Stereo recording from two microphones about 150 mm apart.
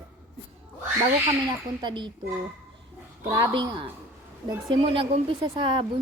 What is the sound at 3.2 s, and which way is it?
Speech, 30° right (ahead or behind).